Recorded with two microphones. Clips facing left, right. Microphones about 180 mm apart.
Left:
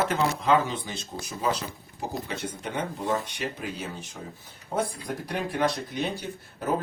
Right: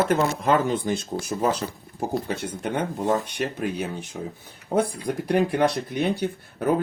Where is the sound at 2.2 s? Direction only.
50° right (ahead or behind).